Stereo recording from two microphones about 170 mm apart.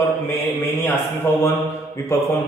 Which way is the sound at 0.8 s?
15° left (ahead or behind).